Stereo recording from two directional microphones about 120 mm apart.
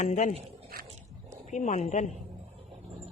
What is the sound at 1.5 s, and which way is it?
Speech, 90° left.